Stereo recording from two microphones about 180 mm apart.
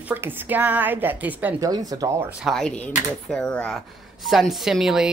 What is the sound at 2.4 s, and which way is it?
Speech, 5° left (ahead or behind).